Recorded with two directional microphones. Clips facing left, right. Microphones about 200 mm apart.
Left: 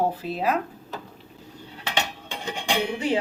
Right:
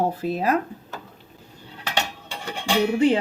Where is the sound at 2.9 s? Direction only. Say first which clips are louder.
Right 8 dB; 55° right (ahead or behind).